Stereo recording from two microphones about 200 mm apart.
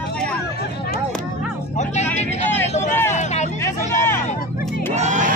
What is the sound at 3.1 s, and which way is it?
Vehicle, 35° left (ahead or behind).